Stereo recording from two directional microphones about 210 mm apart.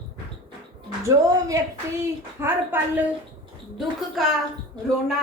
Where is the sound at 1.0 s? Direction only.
15° right (ahead or behind).